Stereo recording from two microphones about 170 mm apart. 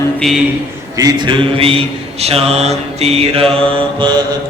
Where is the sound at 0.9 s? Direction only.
25° right (ahead or behind).